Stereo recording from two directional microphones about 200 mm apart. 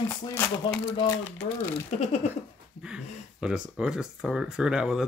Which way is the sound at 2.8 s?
5° right (ahead or behind).